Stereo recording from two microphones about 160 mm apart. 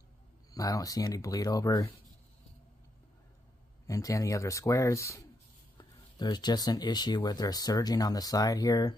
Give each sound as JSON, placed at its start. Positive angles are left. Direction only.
{"t": 0.5, "sound": "speech", "side_deg": 20}
{"t": 3.8, "sound": "speech", "side_deg": 20}